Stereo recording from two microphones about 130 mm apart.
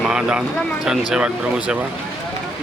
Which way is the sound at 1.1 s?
5° right (ahead or behind).